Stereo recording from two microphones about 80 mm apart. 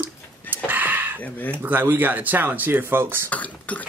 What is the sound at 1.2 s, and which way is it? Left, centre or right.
Speech, left.